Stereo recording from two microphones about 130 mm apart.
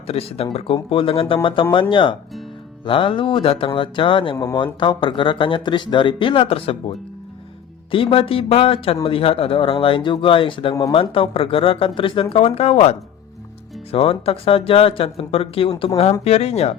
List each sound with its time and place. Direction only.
0.1 s speech: 50° left (ahead or behind)